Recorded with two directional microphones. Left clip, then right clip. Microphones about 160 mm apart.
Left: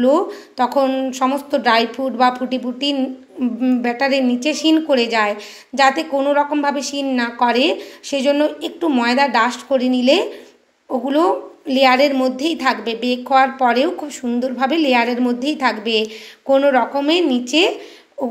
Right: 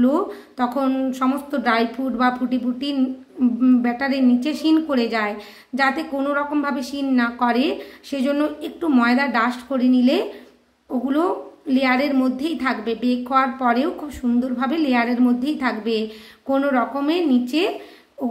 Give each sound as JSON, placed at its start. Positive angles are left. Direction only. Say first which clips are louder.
{"t": 0.0, "sound": "a woman's voice", "louder": "left 5 dB", "side_deg": 10}